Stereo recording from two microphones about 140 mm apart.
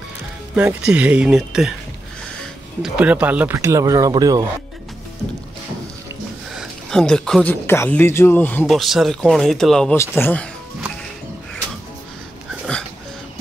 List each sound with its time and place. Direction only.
0.6 s speech: 10° right (ahead or behind)
2.8 s speech: 10° right (ahead or behind); by 4.5 s 25° right (ahead or behind)
6.5 s a sound: centre (ahead or behind)
7.6 s speech: 15° left (ahead or behind)
8.6 s speech: centre (ahead or behind)
9.9 s speech: 15° left (ahead or behind)